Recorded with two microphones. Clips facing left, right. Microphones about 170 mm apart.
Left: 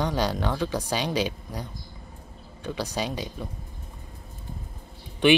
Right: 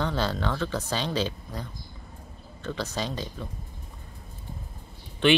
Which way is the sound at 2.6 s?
15° left (ahead or behind).